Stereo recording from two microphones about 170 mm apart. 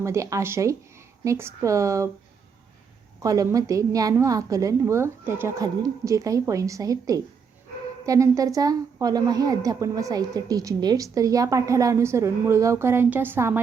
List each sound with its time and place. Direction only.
0.0 s speech: 15° right (ahead or behind)
3.2 s a woman's voice: 20° right (ahead or behind)